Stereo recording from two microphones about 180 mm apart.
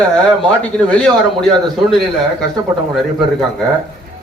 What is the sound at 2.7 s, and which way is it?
Speech, 20° right (ahead or behind).